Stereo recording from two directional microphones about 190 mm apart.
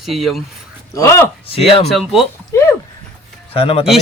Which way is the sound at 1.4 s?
30° left (ahead or behind).